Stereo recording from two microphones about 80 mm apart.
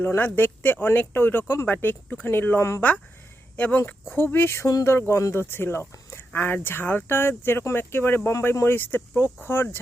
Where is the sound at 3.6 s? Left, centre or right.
Left.